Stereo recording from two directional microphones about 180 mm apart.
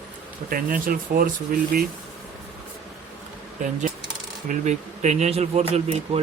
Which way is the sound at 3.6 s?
40° right (ahead or behind).